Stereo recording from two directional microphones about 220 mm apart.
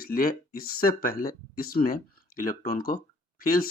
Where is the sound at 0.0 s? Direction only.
40° left (ahead or behind).